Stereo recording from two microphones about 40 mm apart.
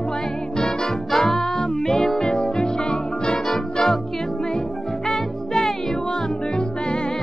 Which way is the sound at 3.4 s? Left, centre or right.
Centre.